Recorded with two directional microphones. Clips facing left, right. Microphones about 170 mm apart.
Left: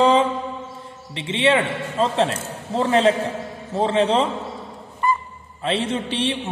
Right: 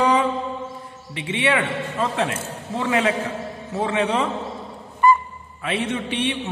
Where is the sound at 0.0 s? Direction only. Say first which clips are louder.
Left 3 dB; 25° left (ahead or behind).